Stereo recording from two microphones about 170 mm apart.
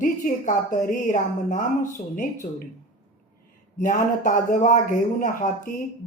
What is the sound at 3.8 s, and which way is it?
A woman's voice, 45° left (ahead or behind).